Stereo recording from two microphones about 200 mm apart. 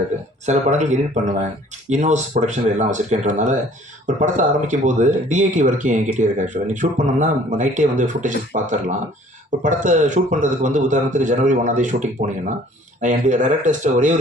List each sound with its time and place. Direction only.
0.4 s speech: 35° right (ahead or behind)